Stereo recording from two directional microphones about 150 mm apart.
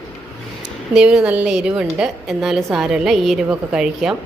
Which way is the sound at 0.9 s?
5° right (ahead or behind).